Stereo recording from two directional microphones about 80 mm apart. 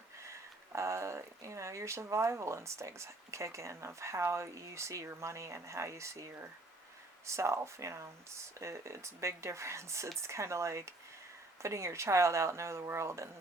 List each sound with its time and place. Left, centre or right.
0.2 s speech: right